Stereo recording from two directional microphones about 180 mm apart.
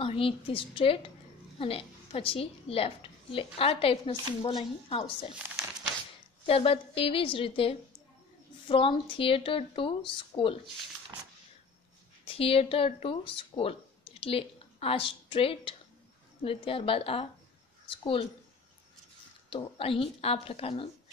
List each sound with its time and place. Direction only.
0.0 s a woman's voice: 30° left (ahead or behind)
6.4 s a woman's voice: 30° left (ahead or behind)
12.3 s a woman's voice: 30° left (ahead or behind)
17.8 s a sound: 30° left (ahead or behind)
19.5 s a woman's voice: 30° left (ahead or behind)